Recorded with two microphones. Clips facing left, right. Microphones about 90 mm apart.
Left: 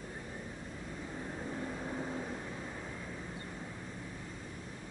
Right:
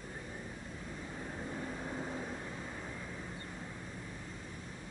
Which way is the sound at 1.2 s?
5° left (ahead or behind).